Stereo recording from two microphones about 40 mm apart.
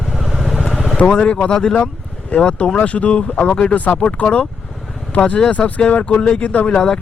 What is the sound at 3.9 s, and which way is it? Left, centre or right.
Speech, left.